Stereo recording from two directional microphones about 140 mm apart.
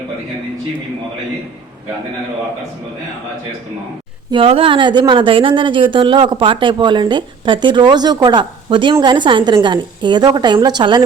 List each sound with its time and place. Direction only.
4.3 s speech: 40° right (ahead or behind)